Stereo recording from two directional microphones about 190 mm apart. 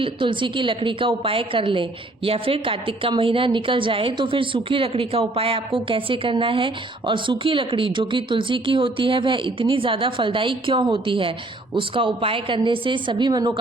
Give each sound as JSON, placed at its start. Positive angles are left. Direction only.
{"t": 0.0, "sound": "a woman's voice", "side_deg": -25}